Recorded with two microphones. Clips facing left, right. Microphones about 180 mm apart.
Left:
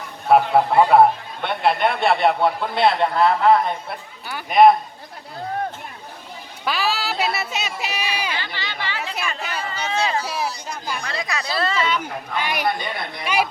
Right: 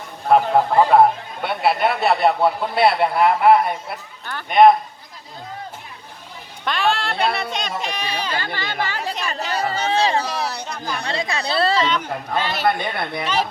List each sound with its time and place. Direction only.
0.3 s a man's voice: 5° left (ahead or behind)
4.3 s a man's voice: 5° left (ahead or behind)
6.7 s a woman's voice: 5° left (ahead or behind)
8.4 s chatter: 50° right (ahead or behind)
9.2 s music: 40° right (ahead or behind)
10.4 s a sound: 65° right (ahead or behind)
11.0 s speech: 30° right (ahead or behind)
12.4 s speech: 15° left (ahead or behind)
12.6 s speech: 60° right (ahead or behind)
13.2 s speech: 10° left (ahead or behind)